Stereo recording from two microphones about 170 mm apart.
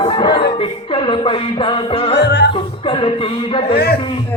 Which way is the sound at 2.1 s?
90° left.